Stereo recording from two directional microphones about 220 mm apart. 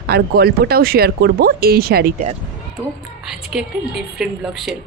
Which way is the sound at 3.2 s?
Centre (ahead or behind).